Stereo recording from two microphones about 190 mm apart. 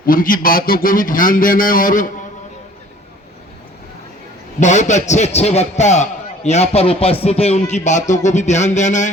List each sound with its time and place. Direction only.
0.0 s a man's voice: 50° left (ahead or behind)
4.6 s a man's voice: 40° left (ahead or behind)